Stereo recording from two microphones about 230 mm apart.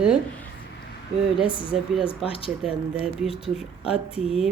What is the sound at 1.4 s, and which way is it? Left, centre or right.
Speech, left.